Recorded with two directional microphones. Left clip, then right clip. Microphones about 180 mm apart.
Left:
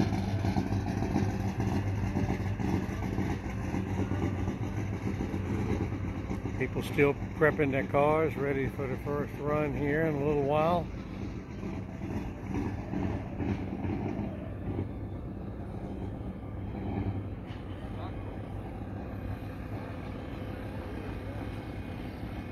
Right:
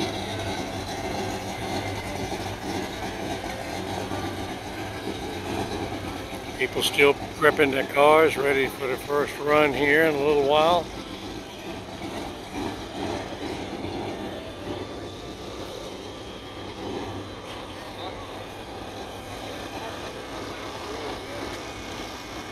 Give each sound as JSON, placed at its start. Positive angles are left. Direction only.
{"t": 6.6, "sound": "speech", "side_deg": -5}
{"t": 9.1, "sound": "speech", "side_deg": -20}
{"t": 10.1, "sound": "speech", "side_deg": 0}